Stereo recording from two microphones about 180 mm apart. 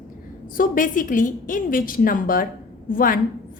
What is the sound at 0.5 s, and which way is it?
A woman's voice, 50° left (ahead or behind).